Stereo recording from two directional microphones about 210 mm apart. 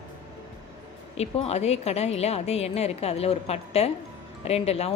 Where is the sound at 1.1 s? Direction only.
30° left (ahead or behind).